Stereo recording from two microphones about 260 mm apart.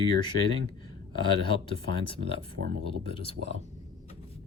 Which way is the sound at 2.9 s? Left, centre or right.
Left.